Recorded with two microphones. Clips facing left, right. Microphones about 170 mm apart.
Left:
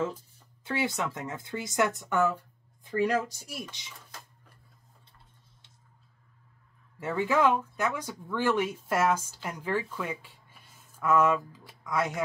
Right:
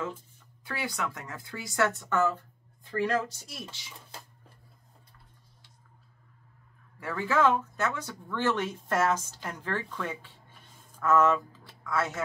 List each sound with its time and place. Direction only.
0.7 s speech: 25° left (ahead or behind)
7.0 s speech: 20° left (ahead or behind)